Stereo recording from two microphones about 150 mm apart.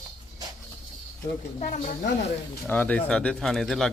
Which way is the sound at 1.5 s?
55° left (ahead or behind).